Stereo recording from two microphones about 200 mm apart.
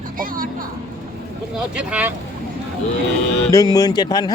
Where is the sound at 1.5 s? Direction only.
5° right (ahead or behind).